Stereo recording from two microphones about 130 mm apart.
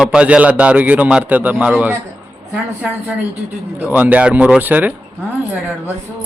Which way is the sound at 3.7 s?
15° right (ahead or behind).